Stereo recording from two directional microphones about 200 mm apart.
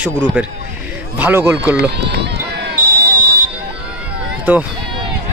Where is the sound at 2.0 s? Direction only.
55° right (ahead or behind).